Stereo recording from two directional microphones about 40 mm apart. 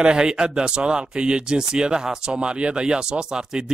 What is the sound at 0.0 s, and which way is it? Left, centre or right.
Speech, right.